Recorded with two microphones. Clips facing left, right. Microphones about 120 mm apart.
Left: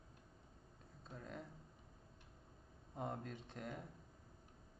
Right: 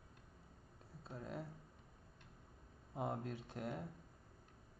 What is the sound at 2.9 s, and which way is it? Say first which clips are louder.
Speech: right 3 dB; 5° right (ahead or behind).